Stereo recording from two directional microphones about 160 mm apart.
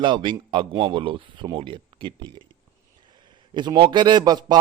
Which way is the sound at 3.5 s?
30° right (ahead or behind).